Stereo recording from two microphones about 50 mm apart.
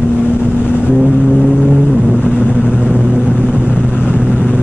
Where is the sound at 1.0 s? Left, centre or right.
Centre.